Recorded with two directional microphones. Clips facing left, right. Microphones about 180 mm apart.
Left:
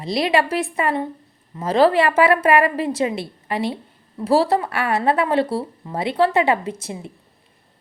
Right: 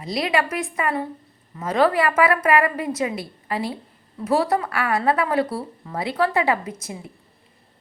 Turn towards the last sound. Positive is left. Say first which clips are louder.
# left 4 dB
turn(degrees=30)  # may be behind; listen again after turning